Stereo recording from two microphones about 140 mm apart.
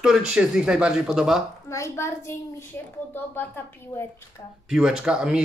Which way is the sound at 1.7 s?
20° left (ahead or behind).